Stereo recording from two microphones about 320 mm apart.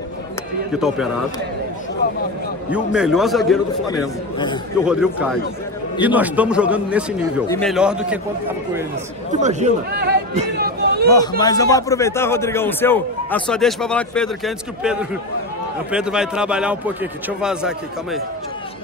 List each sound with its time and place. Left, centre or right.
0.7 s a man's voice: centre
2.7 s a man's voice: centre
4.8 s a man's voice: centre
9.3 s chatter: right
11.1 s a man's voice: centre